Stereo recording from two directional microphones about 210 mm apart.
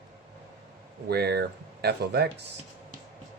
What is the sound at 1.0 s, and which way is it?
Speech, 50° right (ahead or behind).